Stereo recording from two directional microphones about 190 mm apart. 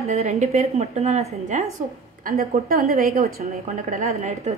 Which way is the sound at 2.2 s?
50° right (ahead or behind).